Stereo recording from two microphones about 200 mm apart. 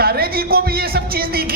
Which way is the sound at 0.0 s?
50° right (ahead or behind).